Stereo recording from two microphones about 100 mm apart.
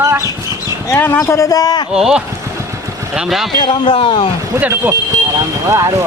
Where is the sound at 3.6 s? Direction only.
55° left (ahead or behind).